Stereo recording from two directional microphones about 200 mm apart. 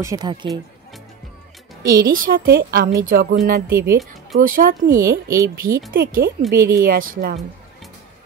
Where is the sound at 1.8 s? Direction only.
45° right (ahead or behind).